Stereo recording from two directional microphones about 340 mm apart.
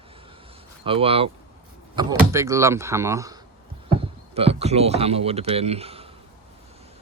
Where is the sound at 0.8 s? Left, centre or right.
Centre.